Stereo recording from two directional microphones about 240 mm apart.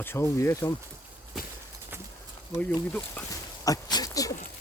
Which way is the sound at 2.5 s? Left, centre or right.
Centre.